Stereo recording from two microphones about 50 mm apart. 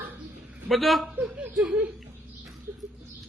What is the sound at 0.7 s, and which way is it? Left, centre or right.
Speech, centre.